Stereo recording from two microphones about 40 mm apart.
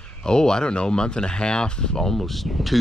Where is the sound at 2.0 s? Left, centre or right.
Centre.